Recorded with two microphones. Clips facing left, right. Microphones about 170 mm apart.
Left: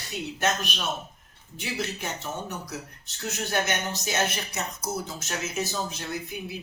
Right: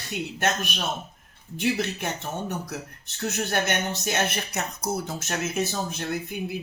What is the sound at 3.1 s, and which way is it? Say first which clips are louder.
Speech: right 2 dB; 55° right (ahead or behind).